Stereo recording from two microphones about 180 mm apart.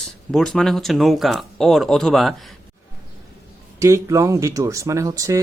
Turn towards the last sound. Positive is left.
turn(degrees=-20)  # may be behind; listen again after turning